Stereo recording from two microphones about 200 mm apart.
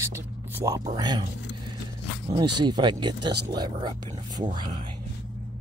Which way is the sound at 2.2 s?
25° right (ahead or behind).